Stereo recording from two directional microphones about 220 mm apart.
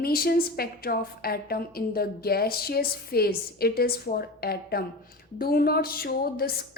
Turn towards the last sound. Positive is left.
turn(degrees=45)  # may be behind; listen again after turning